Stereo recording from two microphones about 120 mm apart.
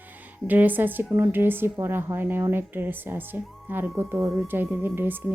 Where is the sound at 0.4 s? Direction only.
15° right (ahead or behind).